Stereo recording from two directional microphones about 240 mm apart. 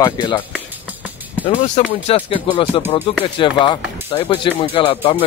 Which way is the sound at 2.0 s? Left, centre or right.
Left.